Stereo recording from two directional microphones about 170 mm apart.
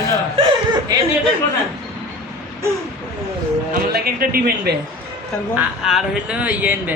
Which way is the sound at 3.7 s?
60° right (ahead or behind).